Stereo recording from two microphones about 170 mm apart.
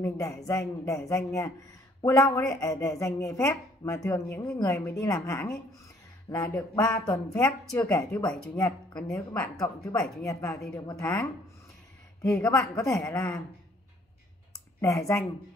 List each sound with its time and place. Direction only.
0.0 s speech: 20° left (ahead or behind)
6.3 s a sound: 20° left (ahead or behind)
7.1 s speech: 10° left (ahead or behind)
9.4 s a woman's voice: 5° left (ahead or behind)
10.2 s speech: 20° left (ahead or behind)
14.8 s speech: 15° left (ahead or behind)